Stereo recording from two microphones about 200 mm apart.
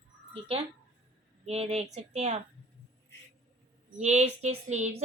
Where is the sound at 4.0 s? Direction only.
35° right (ahead or behind).